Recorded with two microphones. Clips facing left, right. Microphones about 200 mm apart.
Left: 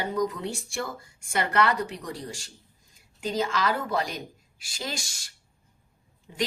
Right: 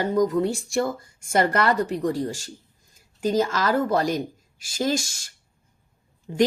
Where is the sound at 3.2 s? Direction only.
40° right (ahead or behind).